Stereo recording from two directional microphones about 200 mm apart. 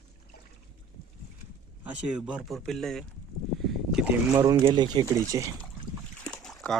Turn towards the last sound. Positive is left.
turn(degrees=0)  # may be behind; listen again after turning